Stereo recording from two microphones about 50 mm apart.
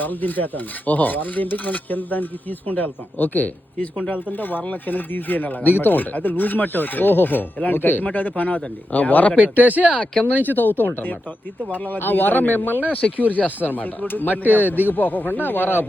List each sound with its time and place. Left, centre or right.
0.0 s filing: left
9.6 s speech: right
9.9 s speech: centre
10.4 s filing: left
14.4 s speech: right
14.8 s filing: left